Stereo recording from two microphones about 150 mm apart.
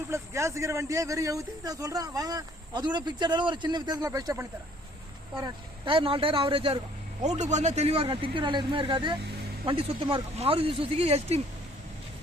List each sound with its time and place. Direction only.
0.1 s speech: 20° right (ahead or behind)
5.8 s speech: 35° right (ahead or behind)
7.2 s speech: 50° right (ahead or behind)